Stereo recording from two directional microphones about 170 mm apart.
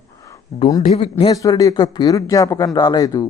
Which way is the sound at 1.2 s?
20° left (ahead or behind).